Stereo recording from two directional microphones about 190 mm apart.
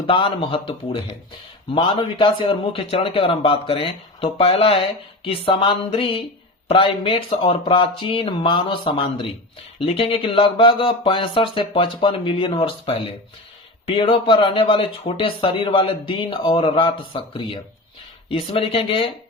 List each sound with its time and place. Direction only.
0.1 s speech: 25° left (ahead or behind)